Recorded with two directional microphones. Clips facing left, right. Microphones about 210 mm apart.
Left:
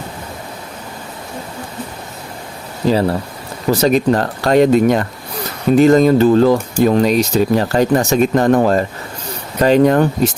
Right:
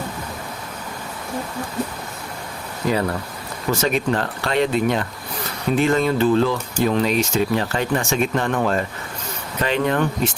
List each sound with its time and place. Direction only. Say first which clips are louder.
2.8 s speech: left 6 dB; 30° left (ahead or behind)